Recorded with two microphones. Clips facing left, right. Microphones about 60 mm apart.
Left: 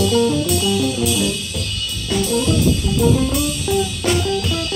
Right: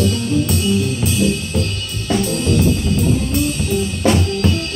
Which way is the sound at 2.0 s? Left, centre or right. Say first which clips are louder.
Right 1 dB; right.